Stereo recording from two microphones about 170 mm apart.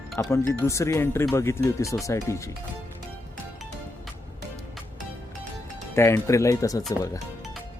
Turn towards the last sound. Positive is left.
turn(degrees=20)  # may be behind; listen again after turning